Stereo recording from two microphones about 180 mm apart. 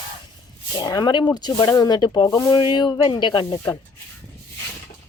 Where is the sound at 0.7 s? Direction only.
20° left (ahead or behind).